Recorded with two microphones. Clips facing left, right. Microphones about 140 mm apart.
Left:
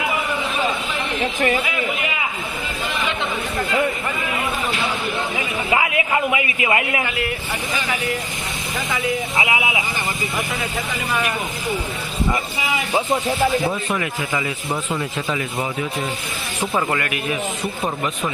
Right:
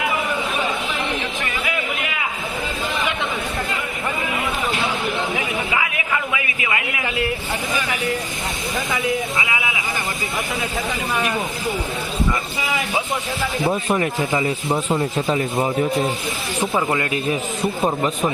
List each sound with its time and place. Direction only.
5.7 s a man's voice: 30° left (ahead or behind)
9.4 s speech: 25° left (ahead or behind)
14.0 s a man's voice: 25° right (ahead or behind)